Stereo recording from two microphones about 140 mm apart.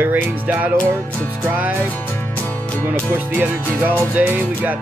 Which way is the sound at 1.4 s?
10° right (ahead or behind).